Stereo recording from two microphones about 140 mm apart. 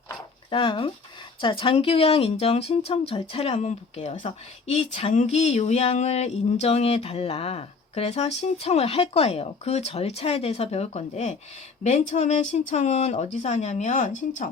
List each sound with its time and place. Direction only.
0.5 s speech: 40° left (ahead or behind); by 14.5 s 60° left (ahead or behind)